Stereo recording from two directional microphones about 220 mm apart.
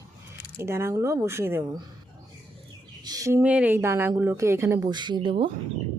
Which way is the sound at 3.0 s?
15° right (ahead or behind).